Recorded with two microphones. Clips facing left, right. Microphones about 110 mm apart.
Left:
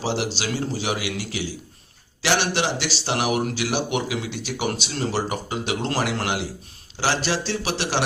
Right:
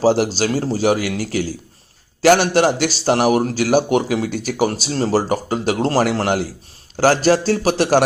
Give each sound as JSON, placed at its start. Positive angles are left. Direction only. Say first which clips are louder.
{"t": 0.0, "sound": "a man's voice", "louder": "right 10 dB", "side_deg": -45}